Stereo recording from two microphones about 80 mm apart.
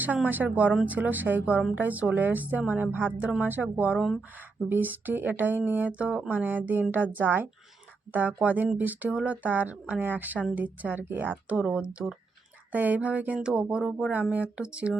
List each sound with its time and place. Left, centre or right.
0.3 s speech: right
3.9 s speech: centre
4.7 s speech: right